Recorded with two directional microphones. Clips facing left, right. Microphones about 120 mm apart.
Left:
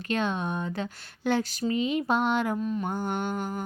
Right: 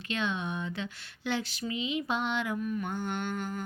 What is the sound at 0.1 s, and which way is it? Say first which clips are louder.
Speech: left 5 dB; 45° left (ahead or behind).